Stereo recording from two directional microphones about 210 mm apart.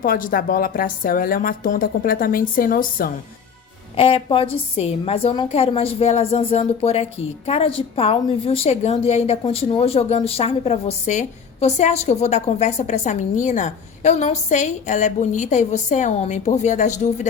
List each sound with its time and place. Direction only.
0.0 s a woman's voice: 40° left (ahead or behind)
3.9 s a woman's voice: 25° left (ahead or behind)